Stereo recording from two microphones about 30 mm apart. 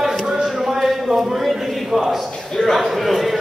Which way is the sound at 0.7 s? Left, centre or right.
Centre.